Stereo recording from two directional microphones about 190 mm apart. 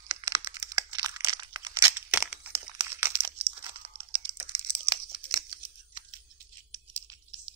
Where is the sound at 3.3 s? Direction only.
30° right (ahead or behind).